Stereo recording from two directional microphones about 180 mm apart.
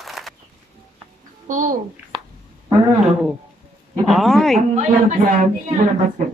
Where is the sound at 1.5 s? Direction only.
45° right (ahead or behind).